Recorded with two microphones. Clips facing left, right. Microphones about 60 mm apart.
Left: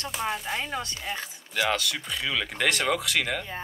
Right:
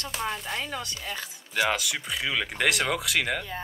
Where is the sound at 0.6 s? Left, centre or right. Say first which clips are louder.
Left 1 dB; left.